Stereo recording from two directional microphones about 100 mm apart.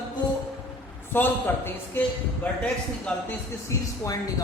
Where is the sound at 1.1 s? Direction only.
20° left (ahead or behind).